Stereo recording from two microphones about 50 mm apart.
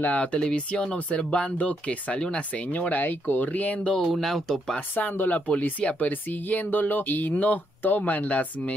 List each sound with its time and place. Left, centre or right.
0.0 s speech: left
4.0 s speech: centre
4.7 s speech: left